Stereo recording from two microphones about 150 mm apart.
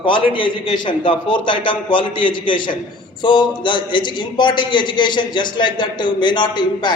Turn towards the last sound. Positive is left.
turn(degrees=30)  # may be behind; listen again after turning